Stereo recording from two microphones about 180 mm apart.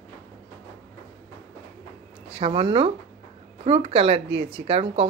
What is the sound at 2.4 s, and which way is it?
Speech, 30° right (ahead or behind).